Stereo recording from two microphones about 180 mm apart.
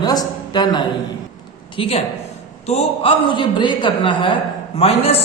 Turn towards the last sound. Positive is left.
turn(degrees=30)  # may be behind; listen again after turning